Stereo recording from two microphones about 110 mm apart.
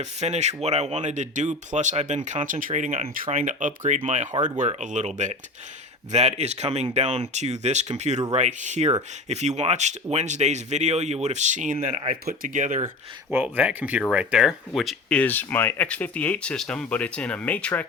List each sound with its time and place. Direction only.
0.0 s speech: 85° right
6.1 s speech: 80° right
13.3 s speech: 15° right (ahead or behind)
15.1 s speech: 15° left (ahead or behind)